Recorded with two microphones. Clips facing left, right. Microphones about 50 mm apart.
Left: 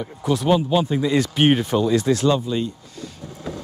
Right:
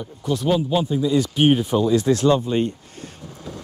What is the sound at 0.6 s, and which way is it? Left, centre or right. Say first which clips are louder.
Speech: left 1 dB; left.